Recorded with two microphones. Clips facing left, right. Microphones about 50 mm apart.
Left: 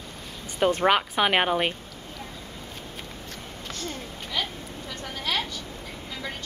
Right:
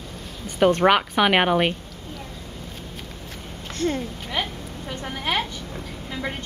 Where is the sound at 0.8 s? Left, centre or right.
Centre.